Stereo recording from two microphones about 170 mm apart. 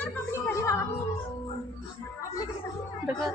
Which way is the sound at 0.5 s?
15° left (ahead or behind).